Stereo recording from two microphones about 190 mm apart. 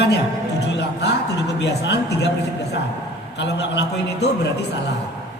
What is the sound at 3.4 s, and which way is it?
A man's voice, 65° left (ahead or behind).